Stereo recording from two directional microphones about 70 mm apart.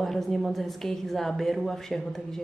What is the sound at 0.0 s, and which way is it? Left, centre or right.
Speech, centre.